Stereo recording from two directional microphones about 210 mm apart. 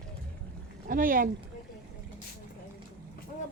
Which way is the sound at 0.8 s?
40° right (ahead or behind).